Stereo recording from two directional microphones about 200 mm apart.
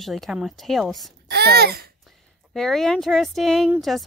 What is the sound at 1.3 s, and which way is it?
Speech, 55° right (ahead or behind).